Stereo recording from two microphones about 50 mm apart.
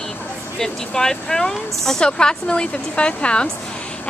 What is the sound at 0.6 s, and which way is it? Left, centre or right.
A woman's voice, centre.